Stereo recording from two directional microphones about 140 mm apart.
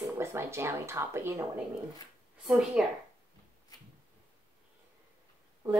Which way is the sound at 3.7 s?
30° left (ahead or behind).